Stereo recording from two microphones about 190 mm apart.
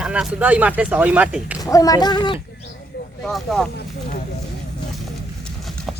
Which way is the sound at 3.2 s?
Centre (ahead or behind).